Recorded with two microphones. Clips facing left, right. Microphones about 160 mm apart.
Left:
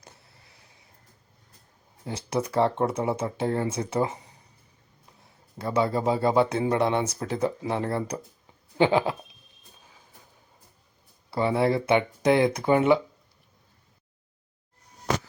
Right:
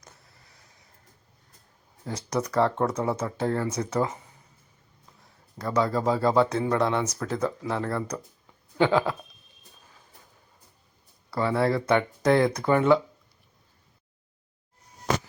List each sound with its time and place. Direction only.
2.0 s speech: 30° left (ahead or behind)
5.5 s speech: 25° left (ahead or behind)
11.3 s speech: 20° left (ahead or behind)